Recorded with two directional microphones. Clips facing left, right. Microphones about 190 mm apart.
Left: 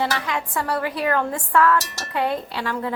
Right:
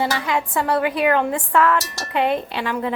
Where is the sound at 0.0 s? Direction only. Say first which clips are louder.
Right 3 dB; 20° right (ahead or behind).